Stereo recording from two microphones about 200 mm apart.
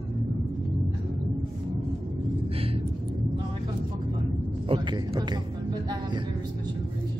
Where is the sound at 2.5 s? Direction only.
30° right (ahead or behind).